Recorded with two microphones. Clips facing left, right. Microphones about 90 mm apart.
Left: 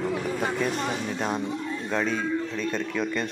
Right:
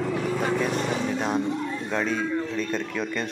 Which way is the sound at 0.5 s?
Centre (ahead or behind).